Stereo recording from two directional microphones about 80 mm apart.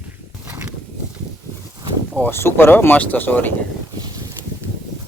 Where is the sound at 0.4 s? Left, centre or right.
Right.